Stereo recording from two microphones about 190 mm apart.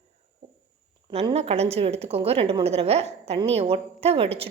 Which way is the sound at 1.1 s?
30° right (ahead or behind).